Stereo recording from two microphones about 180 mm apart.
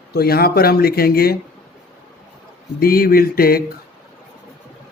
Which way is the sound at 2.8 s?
55° left (ahead or behind).